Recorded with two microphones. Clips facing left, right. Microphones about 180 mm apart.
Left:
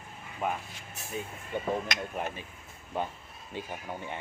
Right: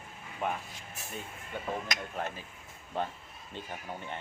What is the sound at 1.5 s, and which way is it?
Speech, 20° left (ahead or behind).